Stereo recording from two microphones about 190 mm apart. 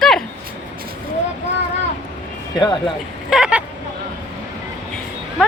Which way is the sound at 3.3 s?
5° right (ahead or behind).